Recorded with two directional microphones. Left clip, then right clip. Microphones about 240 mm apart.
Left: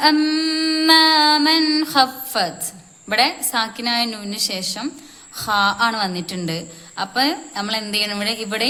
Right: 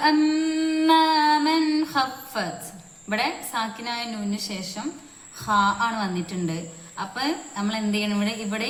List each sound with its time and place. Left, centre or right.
0.0 s mantra: left
3.1 s a woman's voice: left